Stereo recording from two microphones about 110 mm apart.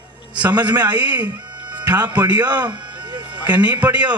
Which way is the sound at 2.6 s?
40° right (ahead or behind).